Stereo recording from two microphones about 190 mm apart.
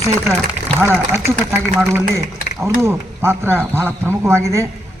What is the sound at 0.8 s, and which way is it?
A man's voice, 15° right (ahead or behind).